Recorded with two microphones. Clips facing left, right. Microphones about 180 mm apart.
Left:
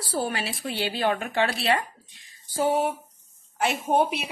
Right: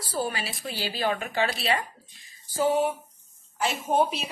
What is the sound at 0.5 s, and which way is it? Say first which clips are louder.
A woman's voice: left 3 dB; 55° left (ahead or behind).